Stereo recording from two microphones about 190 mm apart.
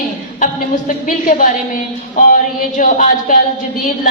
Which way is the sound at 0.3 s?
45° left (ahead or behind).